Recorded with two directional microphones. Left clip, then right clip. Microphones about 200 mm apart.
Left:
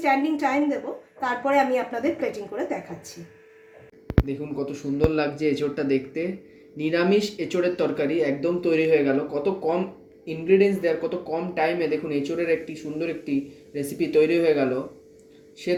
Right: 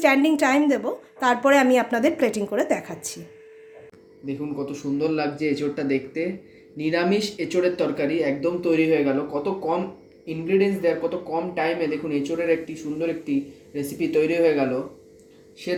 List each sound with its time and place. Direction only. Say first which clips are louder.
0.0 s a woman's voice: right 4 dB; 55° right (ahead or behind)
4.3 s speech: even; 25° left (ahead or behind)